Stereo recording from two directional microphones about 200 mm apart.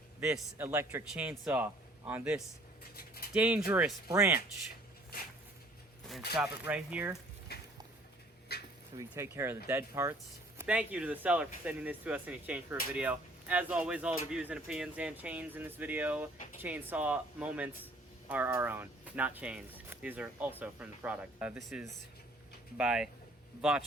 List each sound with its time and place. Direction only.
0.2 s speech: 15° right (ahead or behind)
2.9 s a sound: 50° left (ahead or behind)
3.3 s speech: 5° right (ahead or behind)
6.4 s speech: 5° right (ahead or behind)
7.5 s a sound: 55° left (ahead or behind)
8.5 s dog: 50° left (ahead or behind)
9.0 s speech: 15° right (ahead or behind)